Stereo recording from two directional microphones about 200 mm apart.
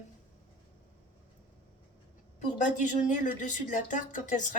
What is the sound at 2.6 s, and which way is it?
Speech, 40° left (ahead or behind).